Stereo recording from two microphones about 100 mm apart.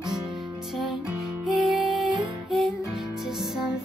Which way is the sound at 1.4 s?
Centre (ahead or behind).